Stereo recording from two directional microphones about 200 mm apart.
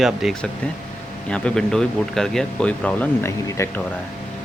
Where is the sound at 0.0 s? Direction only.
Centre (ahead or behind).